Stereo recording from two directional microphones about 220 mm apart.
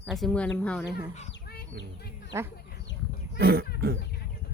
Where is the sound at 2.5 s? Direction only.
50° left (ahead or behind).